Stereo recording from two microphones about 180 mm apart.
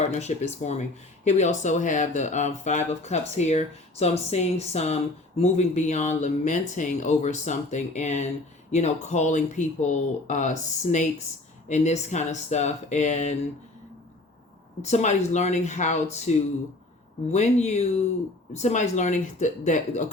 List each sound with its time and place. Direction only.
0.0 s speech: 40° left (ahead or behind)
14.8 s speech: 40° left (ahead or behind)
17.3 s speech: 40° left (ahead or behind)